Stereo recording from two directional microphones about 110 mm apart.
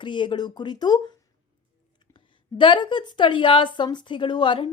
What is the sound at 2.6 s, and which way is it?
A woman's voice, 45° left (ahead or behind).